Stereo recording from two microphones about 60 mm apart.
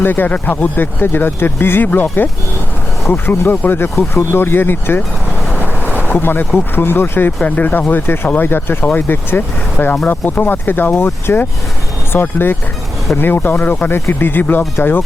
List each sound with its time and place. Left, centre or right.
0.0 s speech: left
6.1 s speech: left
7.4 s speech: left